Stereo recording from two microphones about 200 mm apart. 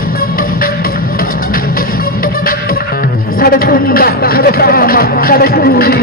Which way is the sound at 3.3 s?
50° left (ahead or behind).